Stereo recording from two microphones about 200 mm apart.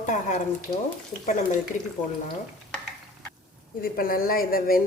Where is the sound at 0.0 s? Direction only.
40° left (ahead or behind).